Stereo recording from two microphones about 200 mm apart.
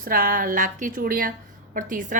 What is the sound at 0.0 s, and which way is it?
A woman's voice, 45° right (ahead or behind).